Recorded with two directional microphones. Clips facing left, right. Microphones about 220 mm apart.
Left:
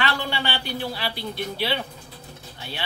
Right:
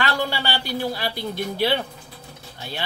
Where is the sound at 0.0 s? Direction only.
40° right (ahead or behind).